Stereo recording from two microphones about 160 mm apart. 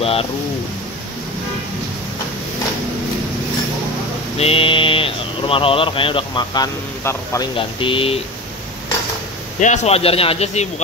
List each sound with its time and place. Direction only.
0.0 s bird: 35° left (ahead or behind)
4.4 s speech: 35° left (ahead or behind)
9.6 s speech: 45° left (ahead or behind)